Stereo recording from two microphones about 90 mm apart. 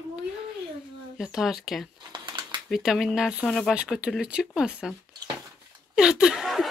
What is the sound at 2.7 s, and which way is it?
Speech, 5° right (ahead or behind).